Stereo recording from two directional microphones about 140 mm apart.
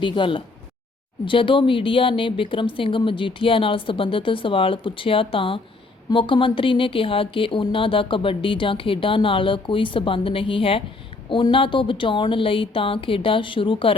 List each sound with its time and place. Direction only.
0.0 s speech: 35° left (ahead or behind)